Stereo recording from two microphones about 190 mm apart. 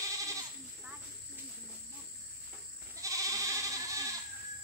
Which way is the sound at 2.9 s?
15° right (ahead or behind).